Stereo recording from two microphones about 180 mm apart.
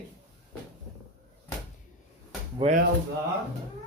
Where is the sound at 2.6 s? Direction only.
30° right (ahead or behind).